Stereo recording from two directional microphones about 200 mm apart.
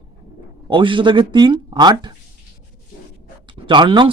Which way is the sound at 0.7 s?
25° right (ahead or behind).